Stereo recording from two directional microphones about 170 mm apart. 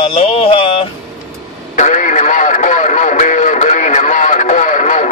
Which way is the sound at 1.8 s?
45° left (ahead or behind).